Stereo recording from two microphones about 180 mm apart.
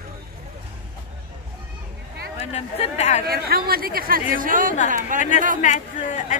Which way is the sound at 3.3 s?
55° right (ahead or behind).